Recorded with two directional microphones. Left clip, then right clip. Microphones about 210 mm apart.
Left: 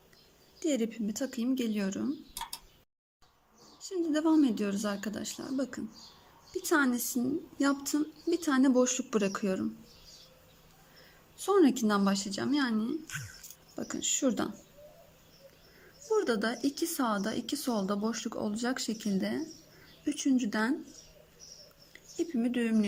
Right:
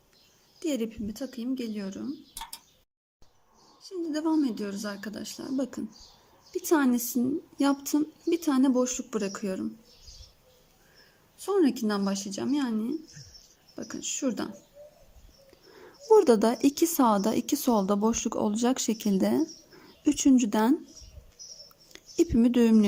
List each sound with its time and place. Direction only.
0.6 s speech: 5° right (ahead or behind)
3.8 s speech: centre (ahead or behind)
11.3 s speech: 5° right (ahead or behind)
16.0 s speech: 20° right (ahead or behind)
21.9 s speech: 20° right (ahead or behind)